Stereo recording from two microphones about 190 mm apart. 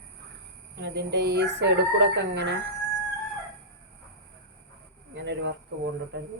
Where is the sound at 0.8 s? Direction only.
60° right (ahead or behind).